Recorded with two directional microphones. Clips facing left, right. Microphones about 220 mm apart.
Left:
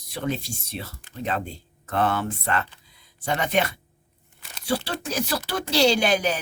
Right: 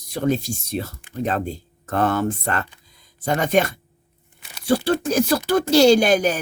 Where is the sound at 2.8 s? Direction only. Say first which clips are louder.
Right 5 dB; 45° right (ahead or behind).